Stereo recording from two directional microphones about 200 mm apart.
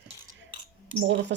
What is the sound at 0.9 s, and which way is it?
Speech, 65° right (ahead or behind).